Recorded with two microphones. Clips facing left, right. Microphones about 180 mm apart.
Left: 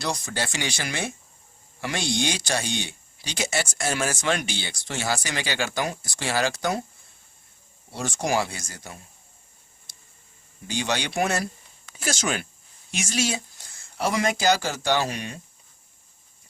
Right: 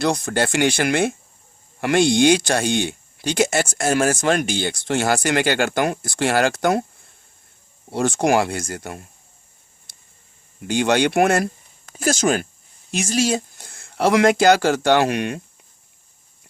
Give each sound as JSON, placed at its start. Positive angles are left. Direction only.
{"t": 0.0, "sound": "speech", "side_deg": -55}
{"t": 7.9, "sound": "speech", "side_deg": -55}
{"t": 9.9, "sound": "a sound", "side_deg": -55}
{"t": 10.7, "sound": "speech", "side_deg": -55}
{"t": 13.6, "sound": "speech", "side_deg": -55}